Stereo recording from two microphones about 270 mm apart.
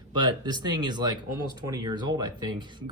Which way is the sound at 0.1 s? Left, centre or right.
Centre.